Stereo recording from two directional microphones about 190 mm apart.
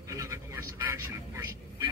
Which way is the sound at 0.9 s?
15° right (ahead or behind).